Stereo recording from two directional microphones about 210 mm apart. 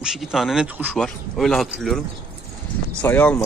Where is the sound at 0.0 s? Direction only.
5° right (ahead or behind).